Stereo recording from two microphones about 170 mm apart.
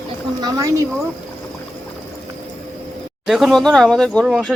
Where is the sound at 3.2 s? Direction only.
Centre (ahead or behind).